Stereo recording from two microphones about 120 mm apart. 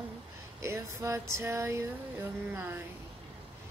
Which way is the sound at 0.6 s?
25° right (ahead or behind).